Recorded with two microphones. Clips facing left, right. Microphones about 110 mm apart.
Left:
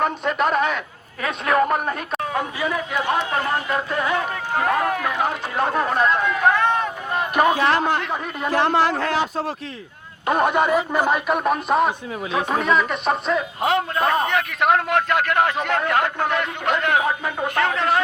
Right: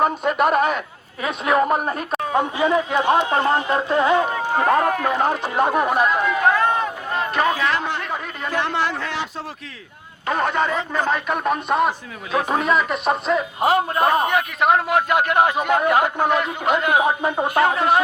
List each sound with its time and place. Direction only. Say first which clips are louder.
0.0 s a man's voice: right 3 dB; 5° right (ahead or behind)
1.2 s speech: right 1 dB; 20° right (ahead or behind)
4.6 s speech: right 3 dB; 5° right (ahead or behind)
5.5 s speech: right 1 dB; 15° right (ahead or behind)
7.5 s a man's voice: left 3 dB; 30° left (ahead or behind)
10.2 s a man's voice: left 2 dB; 15° left (ahead or behind); by 13.4 s centre (ahead or behind)
13.7 s a man's voice: right 1 dB; 15° right (ahead or behind)
14.6 s speech: right 1 dB; 5° right (ahead or behind)
15.2 s a man's voice: right 2 dB; 15° right (ahead or behind)